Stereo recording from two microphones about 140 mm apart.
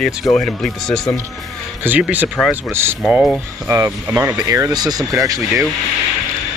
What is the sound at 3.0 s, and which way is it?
Speech, 5° right (ahead or behind).